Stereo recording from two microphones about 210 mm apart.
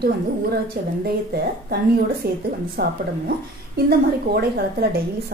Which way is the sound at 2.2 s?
50° right (ahead or behind).